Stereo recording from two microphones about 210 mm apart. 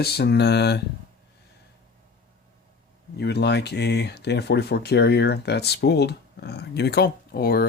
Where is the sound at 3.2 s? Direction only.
50° left (ahead or behind).